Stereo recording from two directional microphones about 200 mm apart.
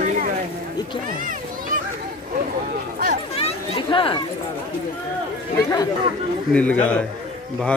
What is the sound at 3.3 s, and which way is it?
Chatter, 30° left (ahead or behind).